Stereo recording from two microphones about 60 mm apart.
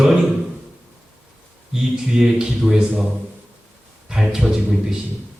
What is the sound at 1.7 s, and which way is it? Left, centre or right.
Speech, centre.